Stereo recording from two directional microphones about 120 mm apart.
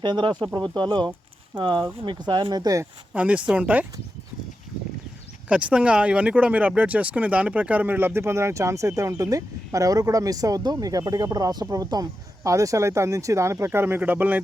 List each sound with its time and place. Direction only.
0.0 s speech: 40° right (ahead or behind)
3.1 s speech: 10° right (ahead or behind)
5.5 s speech: 10° right (ahead or behind)